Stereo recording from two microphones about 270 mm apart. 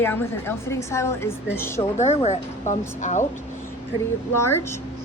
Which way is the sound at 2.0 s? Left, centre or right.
Left.